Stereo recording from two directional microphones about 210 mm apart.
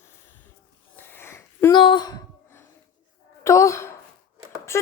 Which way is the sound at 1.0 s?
10° left (ahead or behind).